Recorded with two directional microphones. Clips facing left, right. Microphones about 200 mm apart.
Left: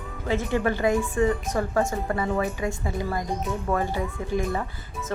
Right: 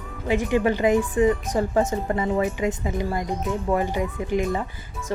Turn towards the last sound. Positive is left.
turn(degrees=-15)  # may be behind; listen again after turning